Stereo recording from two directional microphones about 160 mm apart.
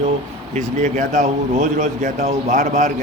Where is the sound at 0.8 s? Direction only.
50° right (ahead or behind).